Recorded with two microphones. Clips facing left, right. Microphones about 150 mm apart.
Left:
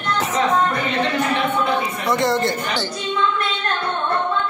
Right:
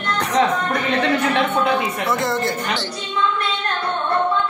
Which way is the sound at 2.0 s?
Centre (ahead or behind).